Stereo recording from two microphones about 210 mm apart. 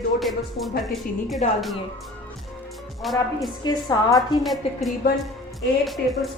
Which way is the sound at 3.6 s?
20° left (ahead or behind).